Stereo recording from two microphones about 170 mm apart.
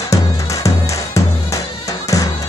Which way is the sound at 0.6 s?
20° left (ahead or behind).